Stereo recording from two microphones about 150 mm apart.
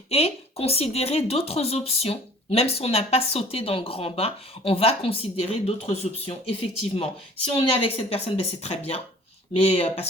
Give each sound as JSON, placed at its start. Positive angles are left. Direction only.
{"t": 0.1, "sound": "speech", "side_deg": 40}